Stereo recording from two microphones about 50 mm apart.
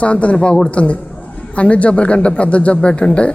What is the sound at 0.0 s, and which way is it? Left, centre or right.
A man's voice, left.